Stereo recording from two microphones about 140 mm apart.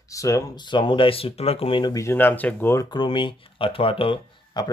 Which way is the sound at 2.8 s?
35° left (ahead or behind).